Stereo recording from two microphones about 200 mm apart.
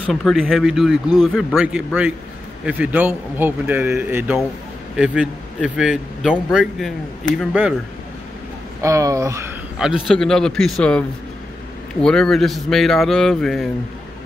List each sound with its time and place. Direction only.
0.1 s a man's voice: centre (ahead or behind)
8.8 s speech: 15° right (ahead or behind)
9.8 s a man's voice: 5° right (ahead or behind)